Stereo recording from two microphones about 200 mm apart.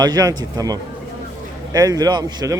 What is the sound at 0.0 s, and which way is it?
Speech, 20° right (ahead or behind).